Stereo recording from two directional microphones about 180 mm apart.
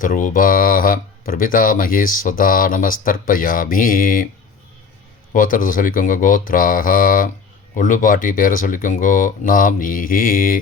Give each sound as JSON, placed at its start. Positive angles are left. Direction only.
{"t": 0.0, "sound": "speech", "side_deg": 45}
{"t": 5.3, "sound": "speech", "side_deg": 50}